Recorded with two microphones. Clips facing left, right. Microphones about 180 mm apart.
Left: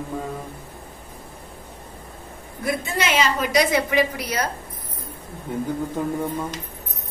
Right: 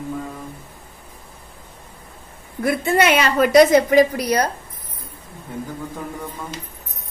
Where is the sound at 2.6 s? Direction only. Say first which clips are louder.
Right 7 dB; 60° right (ahead or behind); by 4.2 s 40° right (ahead or behind).